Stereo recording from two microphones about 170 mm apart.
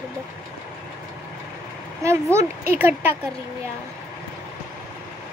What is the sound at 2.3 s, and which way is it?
Speech, 15° right (ahead or behind).